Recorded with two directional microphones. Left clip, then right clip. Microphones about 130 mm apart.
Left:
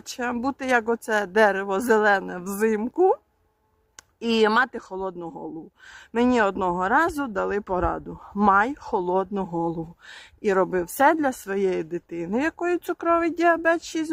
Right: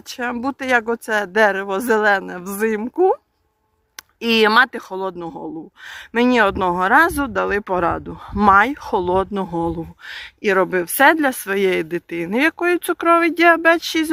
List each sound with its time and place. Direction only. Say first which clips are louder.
0.1 s speech: right 4 dB; 10° right (ahead or behind)
4.2 s speech: right 6 dB; 20° right (ahead or behind)